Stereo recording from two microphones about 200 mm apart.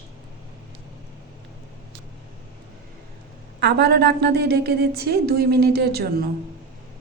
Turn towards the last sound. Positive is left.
turn(degrees=-50)  # may be behind; listen again after turning